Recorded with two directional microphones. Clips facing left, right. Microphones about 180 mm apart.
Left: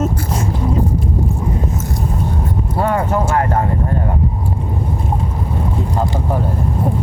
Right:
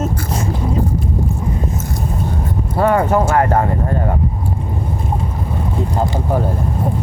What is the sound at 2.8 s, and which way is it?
Speech, 65° right (ahead or behind).